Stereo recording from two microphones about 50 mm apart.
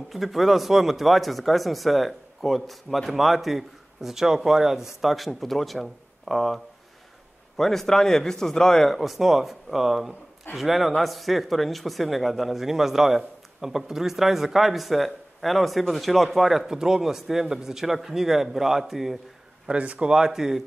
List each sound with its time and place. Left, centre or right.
0.1 s speech: centre
19.6 s speech: right
20.2 s speech: centre